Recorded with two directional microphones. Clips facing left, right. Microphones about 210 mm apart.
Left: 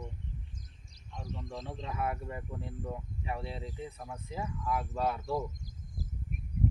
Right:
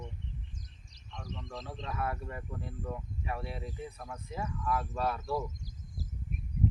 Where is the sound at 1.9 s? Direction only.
20° left (ahead or behind).